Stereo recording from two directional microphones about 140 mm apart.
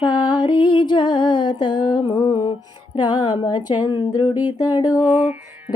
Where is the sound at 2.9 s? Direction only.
35° left (ahead or behind).